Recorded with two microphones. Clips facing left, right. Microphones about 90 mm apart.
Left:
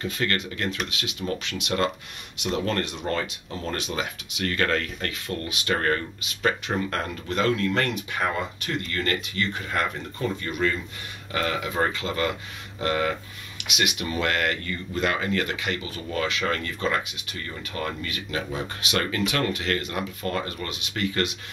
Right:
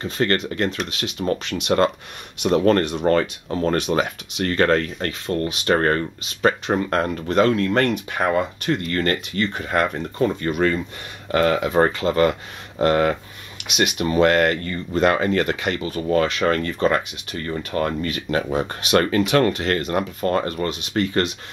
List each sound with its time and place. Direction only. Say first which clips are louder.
0.0 s speech: right 6 dB; 35° right (ahead or behind)
4.5 s speech: right 7 dB; 35° right (ahead or behind)
7.9 s speech: right 6 dB; 50° right (ahead or behind)